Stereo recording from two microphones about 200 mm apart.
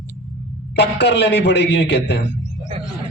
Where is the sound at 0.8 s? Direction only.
55° left (ahead or behind).